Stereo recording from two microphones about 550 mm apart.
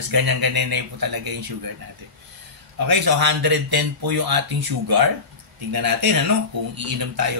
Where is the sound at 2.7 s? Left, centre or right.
Right.